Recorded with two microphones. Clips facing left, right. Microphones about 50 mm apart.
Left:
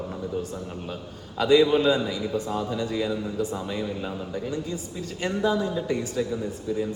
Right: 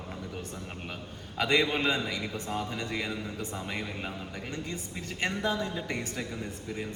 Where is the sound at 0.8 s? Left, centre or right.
Right.